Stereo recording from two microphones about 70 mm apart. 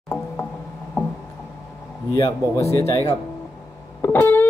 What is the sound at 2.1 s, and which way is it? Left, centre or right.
Speech, left.